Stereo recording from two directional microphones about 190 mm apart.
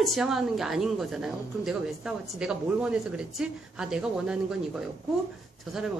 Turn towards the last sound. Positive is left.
turn(degrees=0)  # may be behind; listen again after turning